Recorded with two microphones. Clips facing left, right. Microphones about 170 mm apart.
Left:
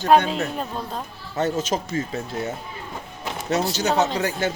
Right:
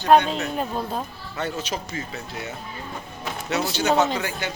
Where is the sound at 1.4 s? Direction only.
45° left (ahead or behind).